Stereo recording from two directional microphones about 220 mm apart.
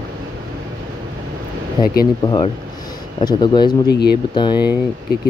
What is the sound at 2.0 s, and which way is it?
Speech, 20° left (ahead or behind).